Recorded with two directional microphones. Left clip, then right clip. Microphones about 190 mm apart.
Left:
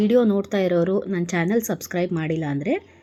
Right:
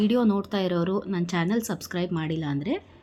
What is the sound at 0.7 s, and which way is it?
A woman's voice, 20° left (ahead or behind).